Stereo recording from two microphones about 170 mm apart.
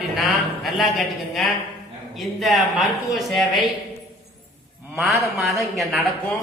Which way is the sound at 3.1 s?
Centre (ahead or behind).